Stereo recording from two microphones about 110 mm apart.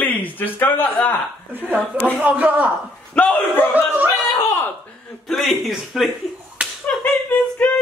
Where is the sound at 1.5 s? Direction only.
15° right (ahead or behind).